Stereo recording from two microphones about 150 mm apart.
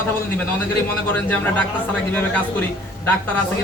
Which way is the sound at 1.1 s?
10° left (ahead or behind).